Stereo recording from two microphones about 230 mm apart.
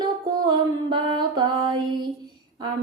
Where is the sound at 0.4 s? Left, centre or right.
Right.